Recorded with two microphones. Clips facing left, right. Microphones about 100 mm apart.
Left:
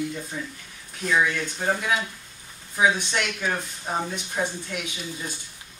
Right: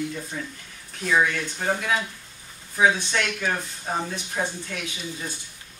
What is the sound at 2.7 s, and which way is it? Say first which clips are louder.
Speech: right 1 dB; 15° left (ahead or behind).